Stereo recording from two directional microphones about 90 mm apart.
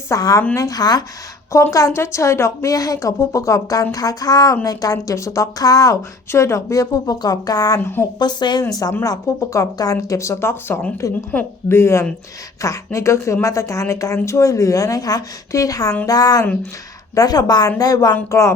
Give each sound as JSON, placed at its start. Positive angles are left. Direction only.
{"t": 0.1, "sound": "a woman's voice", "side_deg": 40}
{"t": 1.7, "sound": "a woman's voice", "side_deg": 35}
{"t": 8.2, "sound": "a woman's voice", "side_deg": 55}
{"t": 9.0, "sound": "a woman's voice", "side_deg": 35}
{"t": 18.3, "sound": "a woman's voice", "side_deg": 35}